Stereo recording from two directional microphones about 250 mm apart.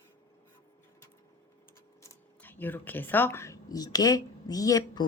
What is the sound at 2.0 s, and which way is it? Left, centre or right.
Speech, centre.